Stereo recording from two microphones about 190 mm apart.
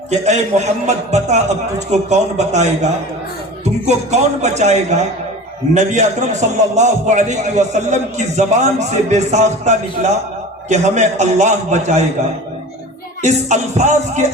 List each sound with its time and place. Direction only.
0.1 s a man's voice: 35° right (ahead or behind)
13.2 s a man's voice: 35° right (ahead or behind)